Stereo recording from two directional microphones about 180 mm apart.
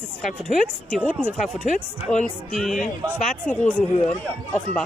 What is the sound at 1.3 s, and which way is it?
Speech, 45° left (ahead or behind).